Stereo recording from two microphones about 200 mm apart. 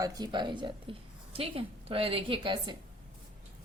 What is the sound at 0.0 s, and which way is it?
A woman's voice, 20° right (ahead or behind).